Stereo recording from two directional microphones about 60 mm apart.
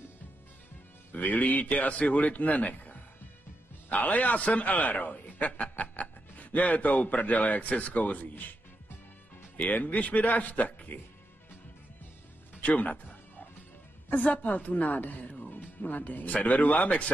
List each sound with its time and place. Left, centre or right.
1.1 s a man's voice: left
9.6 s a man's voice: left
12.5 s music: left
14.1 s a man's voice: left